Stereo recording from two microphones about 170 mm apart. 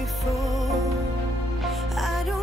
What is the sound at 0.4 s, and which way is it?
Music, centre (ahead or behind).